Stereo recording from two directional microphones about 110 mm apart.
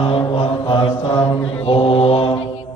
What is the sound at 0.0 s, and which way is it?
Mantra, 60° left (ahead or behind).